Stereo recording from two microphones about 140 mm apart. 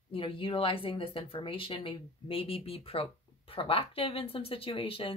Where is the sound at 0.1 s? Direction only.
40° left (ahead or behind).